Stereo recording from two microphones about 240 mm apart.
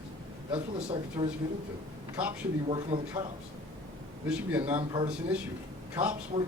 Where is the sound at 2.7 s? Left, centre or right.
Centre.